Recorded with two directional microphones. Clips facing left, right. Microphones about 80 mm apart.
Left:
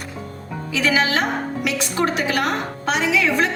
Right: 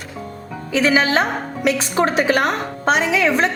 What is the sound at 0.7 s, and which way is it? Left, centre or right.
A woman's voice, right.